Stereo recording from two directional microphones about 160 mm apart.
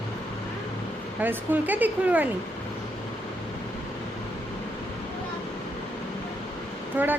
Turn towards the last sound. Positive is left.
turn(degrees=-10)  # may be behind; listen again after turning